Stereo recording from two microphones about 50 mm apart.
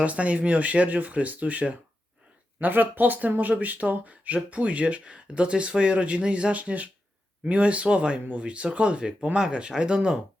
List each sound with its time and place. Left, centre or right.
0.0 s speech: right
2.6 s speech: right; by 10.2 s centre